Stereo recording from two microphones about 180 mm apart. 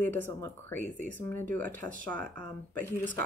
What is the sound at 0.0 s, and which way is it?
Speech, 10° left (ahead or behind).